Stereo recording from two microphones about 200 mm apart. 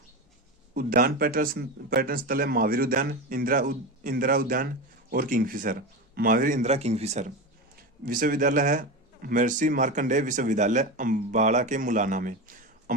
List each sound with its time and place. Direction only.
0.7 s a man's voice: 45° right (ahead or behind)